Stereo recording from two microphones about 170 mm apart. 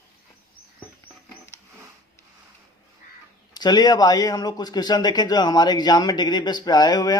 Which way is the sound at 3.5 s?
25° left (ahead or behind).